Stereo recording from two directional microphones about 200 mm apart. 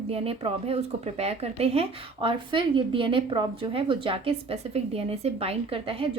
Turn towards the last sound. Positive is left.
turn(degrees=-25)  # may be behind; listen again after turning